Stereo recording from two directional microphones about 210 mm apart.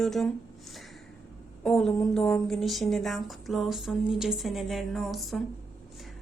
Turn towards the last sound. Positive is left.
turn(degrees=0)  # may be behind; listen again after turning